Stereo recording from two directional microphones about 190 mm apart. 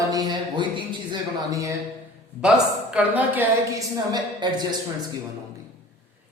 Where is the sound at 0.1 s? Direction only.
20° right (ahead or behind).